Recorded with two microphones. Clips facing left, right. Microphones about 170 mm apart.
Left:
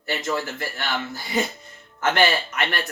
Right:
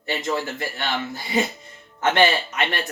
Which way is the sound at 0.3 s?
25° right (ahead or behind).